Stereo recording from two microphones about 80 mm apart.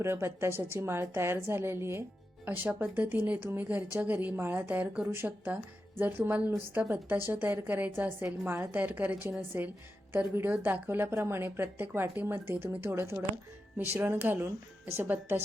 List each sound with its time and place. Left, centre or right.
0.0 s a woman's voice: right
2.4 s a woman's voice: right